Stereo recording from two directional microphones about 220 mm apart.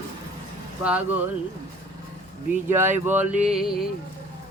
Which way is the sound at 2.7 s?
10° right (ahead or behind).